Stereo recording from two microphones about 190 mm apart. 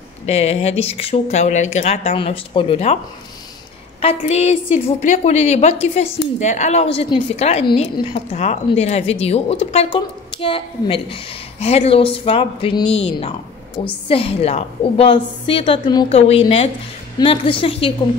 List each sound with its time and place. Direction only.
0.3 s a woman's voice: 35° left (ahead or behind)
4.0 s a woman's voice: 35° left (ahead or behind)